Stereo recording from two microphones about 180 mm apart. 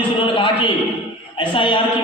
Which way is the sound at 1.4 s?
30° left (ahead or behind).